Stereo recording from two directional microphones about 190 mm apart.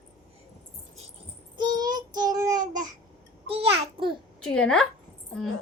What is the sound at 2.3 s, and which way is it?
Child singing, 45° right (ahead or behind).